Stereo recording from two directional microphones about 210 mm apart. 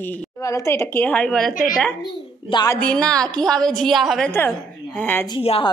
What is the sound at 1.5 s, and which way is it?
Speech, 40° left (ahead or behind).